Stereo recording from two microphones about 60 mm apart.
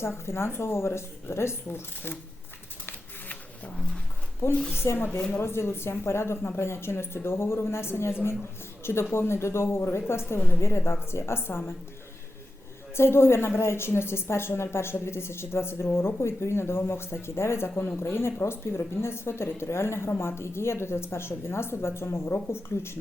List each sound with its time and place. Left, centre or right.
0.0 s a woman's voice: left
4.7 s a woman's voice: left
13.0 s a woman's voice: left